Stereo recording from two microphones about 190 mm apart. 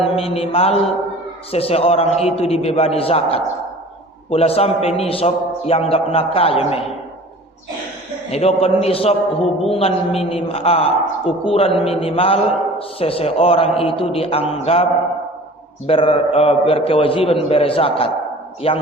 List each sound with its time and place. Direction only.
0.2 s a man's voice: 30° left (ahead or behind)
8.3 s a man's voice: 35° left (ahead or behind)
15.9 s a man's voice: 30° left (ahead or behind)